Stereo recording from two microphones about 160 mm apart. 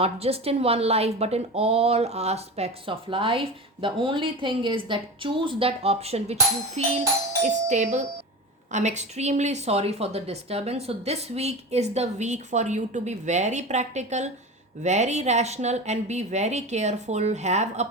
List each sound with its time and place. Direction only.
0.0 s a woman's voice: 40° right (ahead or behind)